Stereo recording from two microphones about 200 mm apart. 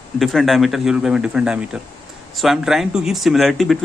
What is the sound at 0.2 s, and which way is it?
Speech, centre (ahead or behind).